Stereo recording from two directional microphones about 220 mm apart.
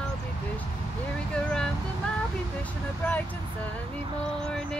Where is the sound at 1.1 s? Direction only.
5° left (ahead or behind).